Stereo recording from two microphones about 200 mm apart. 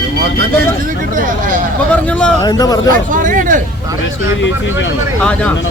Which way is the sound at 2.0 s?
5° left (ahead or behind).